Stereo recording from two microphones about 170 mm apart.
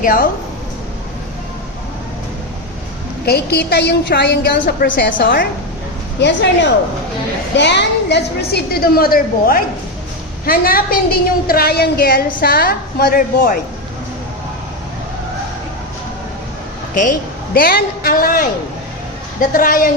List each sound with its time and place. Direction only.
0.0 s a woman's voice: 55° left (ahead or behind)
3.2 s a woman's voice: 65° left (ahead or behind)
6.1 s a woman's voice: 90° left; by 13.6 s 60° left (ahead or behind)
16.9 s a man's voice: 50° left (ahead or behind)